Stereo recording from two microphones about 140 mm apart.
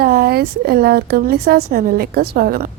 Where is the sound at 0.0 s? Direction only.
90° right.